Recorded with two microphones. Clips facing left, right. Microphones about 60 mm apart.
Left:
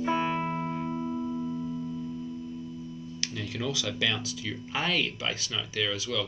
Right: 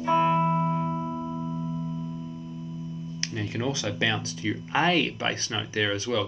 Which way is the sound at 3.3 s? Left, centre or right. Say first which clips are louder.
Right 3 dB; right.